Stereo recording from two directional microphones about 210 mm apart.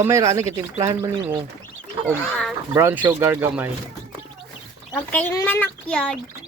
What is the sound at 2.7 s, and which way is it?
Speech, 10° right (ahead or behind).